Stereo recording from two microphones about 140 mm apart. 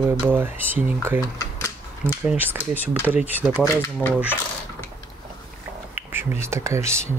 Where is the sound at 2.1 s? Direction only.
10° right (ahead or behind).